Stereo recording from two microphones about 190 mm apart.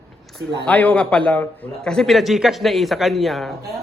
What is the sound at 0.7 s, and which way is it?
A man's voice, 5° left (ahead or behind).